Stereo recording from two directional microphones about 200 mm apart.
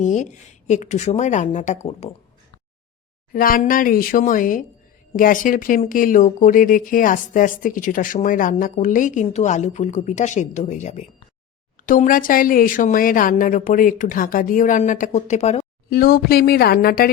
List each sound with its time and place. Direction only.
0.0 s speech: 35° left (ahead or behind)
3.3 s speech: 45° left (ahead or behind)
15.9 s speech: 50° left (ahead or behind)